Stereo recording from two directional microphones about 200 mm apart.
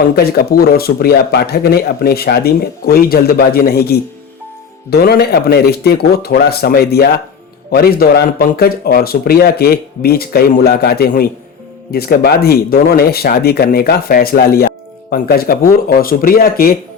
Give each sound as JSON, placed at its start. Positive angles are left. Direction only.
{"t": 0.2, "sound": "a man's voice", "side_deg": 50}